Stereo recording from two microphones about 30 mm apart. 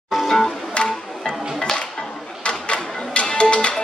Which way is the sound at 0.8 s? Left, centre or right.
Left.